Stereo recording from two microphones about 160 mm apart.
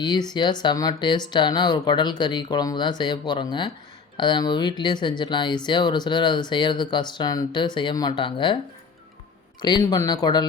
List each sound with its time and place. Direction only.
0.0 s speech: 25° left (ahead or behind)
9.6 s speech: 25° left (ahead or behind)